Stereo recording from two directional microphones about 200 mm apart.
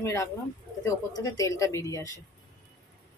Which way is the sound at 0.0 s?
15° left (ahead or behind).